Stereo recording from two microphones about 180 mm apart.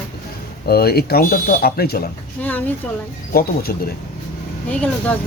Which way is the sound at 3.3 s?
55° left (ahead or behind).